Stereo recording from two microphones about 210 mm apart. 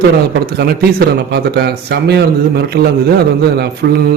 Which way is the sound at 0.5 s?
50° right (ahead or behind).